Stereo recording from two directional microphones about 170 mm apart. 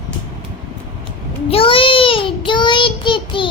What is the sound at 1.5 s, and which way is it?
Child singing, 30° left (ahead or behind).